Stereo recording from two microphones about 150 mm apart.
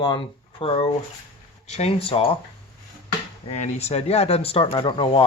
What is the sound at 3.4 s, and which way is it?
Speech, 50° left (ahead or behind).